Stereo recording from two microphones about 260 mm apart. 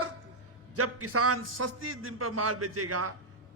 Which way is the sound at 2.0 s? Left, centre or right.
Right.